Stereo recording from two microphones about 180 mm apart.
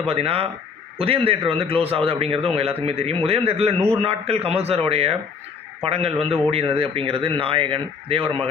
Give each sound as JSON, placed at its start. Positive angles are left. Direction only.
{"t": 0.1, "sound": "speech", "side_deg": -35}